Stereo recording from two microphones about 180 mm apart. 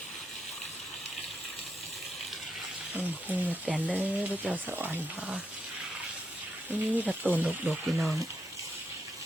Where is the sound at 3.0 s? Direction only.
10° right (ahead or behind).